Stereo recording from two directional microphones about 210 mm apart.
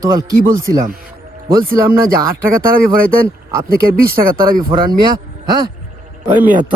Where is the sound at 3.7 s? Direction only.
45° right (ahead or behind).